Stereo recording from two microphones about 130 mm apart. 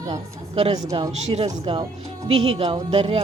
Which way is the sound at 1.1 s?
60° right (ahead or behind).